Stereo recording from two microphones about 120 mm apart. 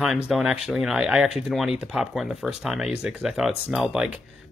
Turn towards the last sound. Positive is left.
turn(degrees=-5)  # may be behind; listen again after turning